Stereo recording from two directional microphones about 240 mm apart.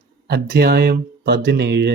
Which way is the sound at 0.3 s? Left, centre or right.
Right.